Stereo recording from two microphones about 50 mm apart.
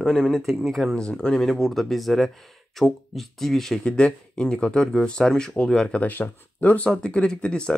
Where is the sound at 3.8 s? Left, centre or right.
Centre.